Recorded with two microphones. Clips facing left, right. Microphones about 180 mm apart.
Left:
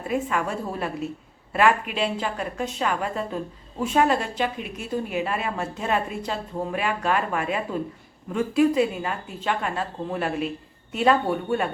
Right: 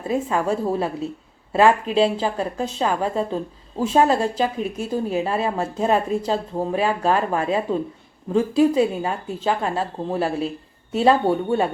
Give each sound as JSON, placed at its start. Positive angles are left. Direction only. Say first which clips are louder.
{"t": 0.1, "sound": "a woman's voice", "louder": "right 4 dB", "side_deg": -30}